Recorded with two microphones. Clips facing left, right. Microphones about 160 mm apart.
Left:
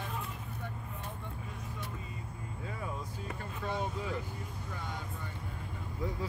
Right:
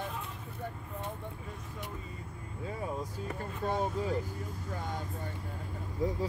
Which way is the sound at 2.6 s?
35° right (ahead or behind).